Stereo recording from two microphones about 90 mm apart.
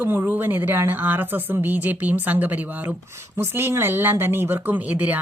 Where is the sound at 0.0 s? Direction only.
25° right (ahead or behind).